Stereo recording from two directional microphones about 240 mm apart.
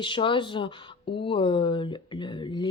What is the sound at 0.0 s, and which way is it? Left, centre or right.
A woman's voice, left.